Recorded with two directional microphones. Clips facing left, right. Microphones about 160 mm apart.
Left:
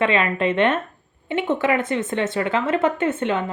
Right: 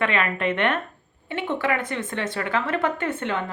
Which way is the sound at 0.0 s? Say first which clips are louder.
Left 4 dB; 20° left (ahead or behind).